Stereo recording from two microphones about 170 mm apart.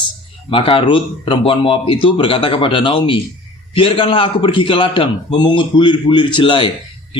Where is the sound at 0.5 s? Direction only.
30° left (ahead or behind).